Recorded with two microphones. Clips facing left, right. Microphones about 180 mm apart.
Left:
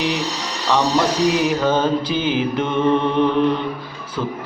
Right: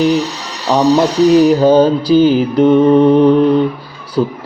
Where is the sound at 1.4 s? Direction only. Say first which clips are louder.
Right 10 dB; 35° right (ahead or behind).